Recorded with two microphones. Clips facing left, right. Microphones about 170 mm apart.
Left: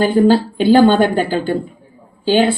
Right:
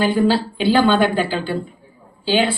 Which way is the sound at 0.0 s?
45° left (ahead or behind).